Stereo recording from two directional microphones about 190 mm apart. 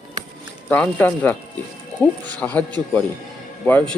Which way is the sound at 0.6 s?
5° left (ahead or behind).